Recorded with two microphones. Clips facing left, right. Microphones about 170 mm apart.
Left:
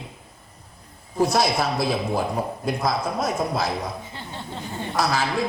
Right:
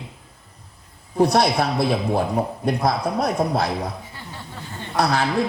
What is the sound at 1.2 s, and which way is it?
A man's voice, 60° right (ahead or behind).